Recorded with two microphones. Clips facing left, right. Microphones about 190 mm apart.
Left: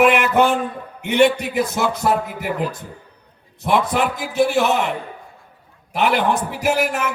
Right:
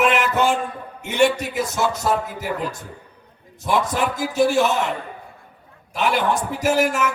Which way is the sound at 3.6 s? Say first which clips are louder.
Left 3 dB; 65° left (ahead or behind).